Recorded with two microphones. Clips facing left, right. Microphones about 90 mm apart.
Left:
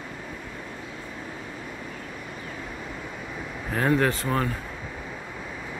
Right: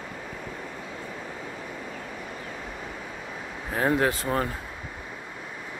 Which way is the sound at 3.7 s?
20° right (ahead or behind).